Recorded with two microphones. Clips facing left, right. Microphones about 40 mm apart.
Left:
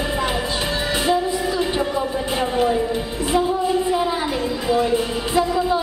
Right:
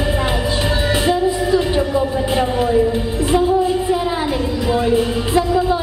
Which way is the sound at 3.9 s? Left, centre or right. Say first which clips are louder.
Right 2 dB; centre.